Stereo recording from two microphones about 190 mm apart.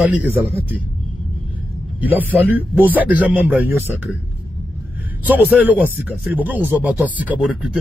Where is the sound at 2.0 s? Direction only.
10° right (ahead or behind).